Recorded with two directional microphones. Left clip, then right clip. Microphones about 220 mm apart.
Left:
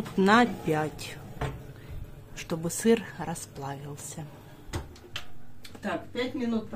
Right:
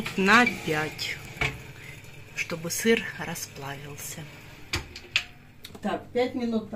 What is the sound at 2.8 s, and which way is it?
Speech, 20° left (ahead or behind).